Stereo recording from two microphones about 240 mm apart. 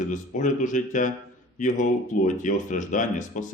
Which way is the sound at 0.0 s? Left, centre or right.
Left.